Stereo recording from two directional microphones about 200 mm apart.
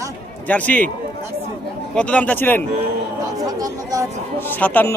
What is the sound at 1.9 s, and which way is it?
Speech, 5° left (ahead or behind).